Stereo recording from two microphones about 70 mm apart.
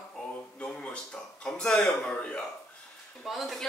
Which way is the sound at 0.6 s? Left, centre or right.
Centre.